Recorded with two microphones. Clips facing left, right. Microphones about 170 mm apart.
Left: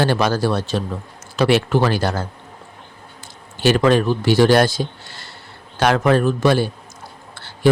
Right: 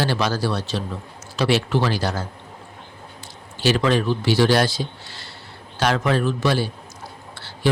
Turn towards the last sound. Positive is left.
turn(degrees=50)  # may be behind; listen again after turning